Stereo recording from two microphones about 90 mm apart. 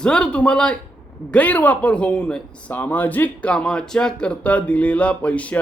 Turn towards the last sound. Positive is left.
turn(degrees=15)  # may be behind; listen again after turning